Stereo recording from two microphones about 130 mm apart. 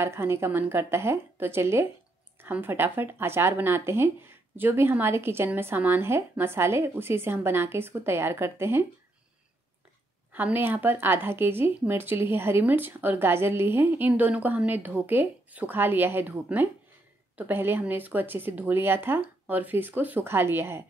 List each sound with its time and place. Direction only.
0.0 s a woman's voice: 20° right (ahead or behind)
10.3 s speech: 15° right (ahead or behind)